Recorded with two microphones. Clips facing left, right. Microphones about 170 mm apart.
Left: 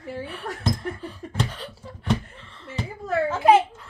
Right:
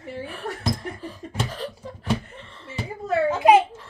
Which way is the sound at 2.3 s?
35° right (ahead or behind).